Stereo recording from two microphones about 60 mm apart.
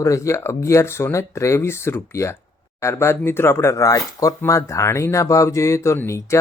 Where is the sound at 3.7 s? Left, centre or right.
Left.